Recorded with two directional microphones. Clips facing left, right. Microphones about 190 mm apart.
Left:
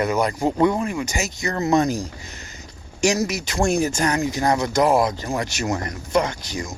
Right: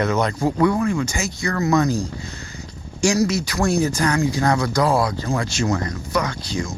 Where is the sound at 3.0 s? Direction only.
20° left (ahead or behind).